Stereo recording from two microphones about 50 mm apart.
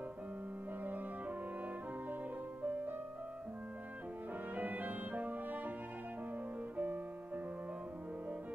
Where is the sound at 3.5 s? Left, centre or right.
Right.